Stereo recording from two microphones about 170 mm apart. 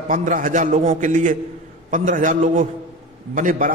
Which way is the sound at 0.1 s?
50° right (ahead or behind).